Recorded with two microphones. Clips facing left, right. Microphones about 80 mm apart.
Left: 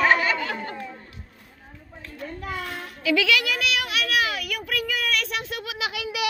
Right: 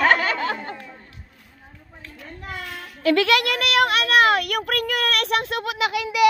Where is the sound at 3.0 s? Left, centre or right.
Right.